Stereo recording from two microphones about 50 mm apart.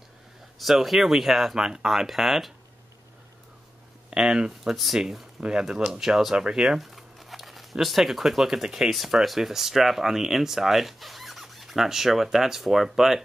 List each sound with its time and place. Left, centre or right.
0.6 s speech: centre
4.1 s speech: centre
6.8 s a sound: centre
7.7 s speech: centre
8.9 s speech: centre